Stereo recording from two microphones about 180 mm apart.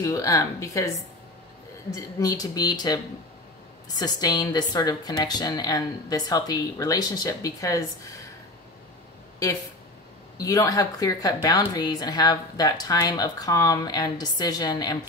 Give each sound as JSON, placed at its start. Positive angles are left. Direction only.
{"t": 0.0, "sound": "speech", "side_deg": 20}
{"t": 2.0, "sound": "a woman's voice", "side_deg": 20}
{"t": 4.0, "sound": "a woman's voice", "side_deg": 20}
{"t": 10.3, "sound": "a woman's voice", "side_deg": 20}